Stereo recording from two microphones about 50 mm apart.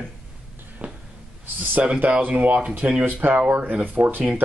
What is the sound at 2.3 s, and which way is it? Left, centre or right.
Speech, right.